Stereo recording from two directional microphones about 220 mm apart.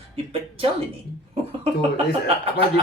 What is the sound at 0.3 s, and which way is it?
Speech, 25° right (ahead or behind).